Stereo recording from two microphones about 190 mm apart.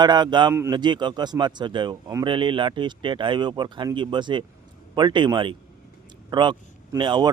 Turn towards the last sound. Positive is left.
turn(degrees=-25)  # may be behind; listen again after turning